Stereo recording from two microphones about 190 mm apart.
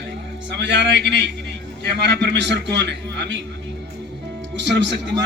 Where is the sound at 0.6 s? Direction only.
65° right (ahead or behind).